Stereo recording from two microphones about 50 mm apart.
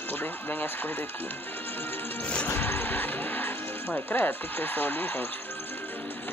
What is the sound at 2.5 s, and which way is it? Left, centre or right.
Music, left.